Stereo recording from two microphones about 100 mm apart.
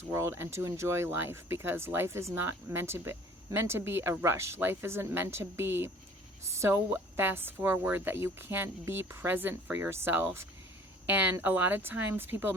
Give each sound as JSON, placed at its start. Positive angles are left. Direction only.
{"t": 0.1, "sound": "speech", "side_deg": -25}